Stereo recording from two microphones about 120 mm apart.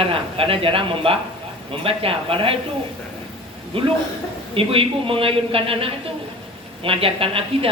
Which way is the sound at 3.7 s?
50° right (ahead or behind).